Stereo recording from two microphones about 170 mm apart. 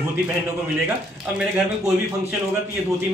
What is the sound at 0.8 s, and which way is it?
Speech, 5° right (ahead or behind).